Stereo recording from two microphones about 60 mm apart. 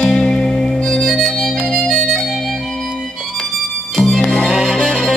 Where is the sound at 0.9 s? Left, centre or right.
Centre.